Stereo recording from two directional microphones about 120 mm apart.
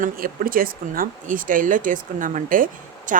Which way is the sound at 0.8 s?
90° right.